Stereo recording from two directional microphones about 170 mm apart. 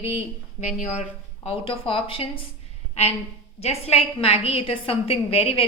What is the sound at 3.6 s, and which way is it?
A woman's voice, 35° left (ahead or behind).